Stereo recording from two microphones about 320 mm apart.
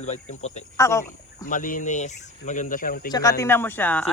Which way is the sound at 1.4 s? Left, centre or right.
Left.